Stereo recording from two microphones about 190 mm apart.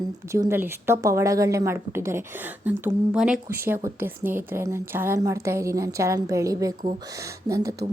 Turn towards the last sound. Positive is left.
turn(degrees=-15)  # may be behind; listen again after turning